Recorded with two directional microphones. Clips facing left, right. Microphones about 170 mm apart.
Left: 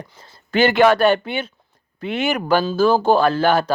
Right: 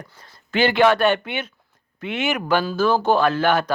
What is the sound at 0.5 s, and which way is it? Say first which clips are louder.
Speech: left 3 dB; 45° left (ahead or behind).